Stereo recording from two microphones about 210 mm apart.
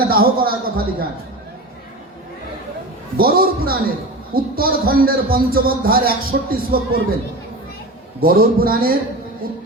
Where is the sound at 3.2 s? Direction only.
45° right (ahead or behind).